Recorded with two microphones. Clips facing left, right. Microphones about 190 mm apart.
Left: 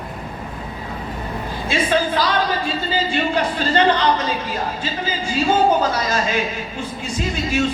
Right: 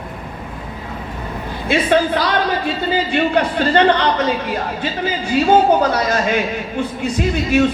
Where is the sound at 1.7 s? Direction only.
60° right (ahead or behind).